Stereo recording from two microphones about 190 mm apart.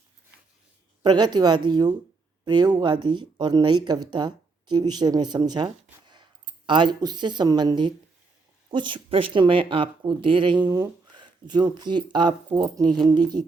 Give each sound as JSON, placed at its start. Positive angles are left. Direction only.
{"t": 1.0, "sound": "speech", "side_deg": -20}